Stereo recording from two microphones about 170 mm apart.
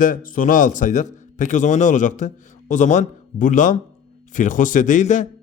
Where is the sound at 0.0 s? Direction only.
55° left (ahead or behind).